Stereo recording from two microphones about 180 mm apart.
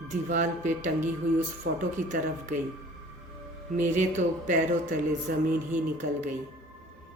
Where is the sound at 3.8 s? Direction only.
45° right (ahead or behind).